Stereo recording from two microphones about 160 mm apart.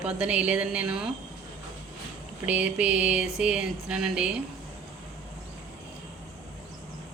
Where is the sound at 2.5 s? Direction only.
10° right (ahead or behind).